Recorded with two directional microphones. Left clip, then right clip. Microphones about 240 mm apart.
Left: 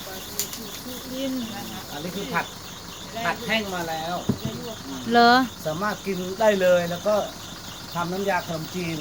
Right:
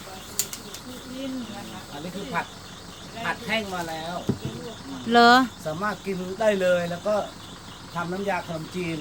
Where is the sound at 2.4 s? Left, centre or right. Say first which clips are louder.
Left 1 dB; centre.